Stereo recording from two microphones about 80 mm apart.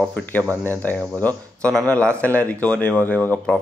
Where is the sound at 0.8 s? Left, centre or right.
Left.